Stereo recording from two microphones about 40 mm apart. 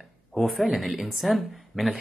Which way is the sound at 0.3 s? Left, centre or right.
Centre.